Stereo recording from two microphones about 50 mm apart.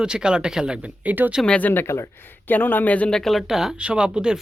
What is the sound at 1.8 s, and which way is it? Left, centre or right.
Speech, left.